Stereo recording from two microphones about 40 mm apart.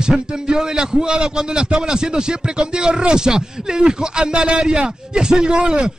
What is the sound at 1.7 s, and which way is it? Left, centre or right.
A man's voice, centre.